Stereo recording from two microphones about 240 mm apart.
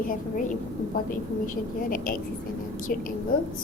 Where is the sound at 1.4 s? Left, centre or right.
Left.